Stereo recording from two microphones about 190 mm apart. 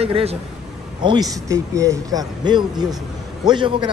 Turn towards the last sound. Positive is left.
turn(degrees=-25)  # may be behind; listen again after turning